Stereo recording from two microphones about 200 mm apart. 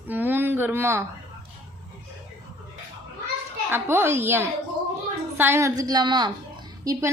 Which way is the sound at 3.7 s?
10° right (ahead or behind).